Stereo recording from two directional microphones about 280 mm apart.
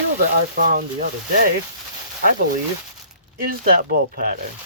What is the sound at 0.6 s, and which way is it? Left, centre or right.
Speech, right.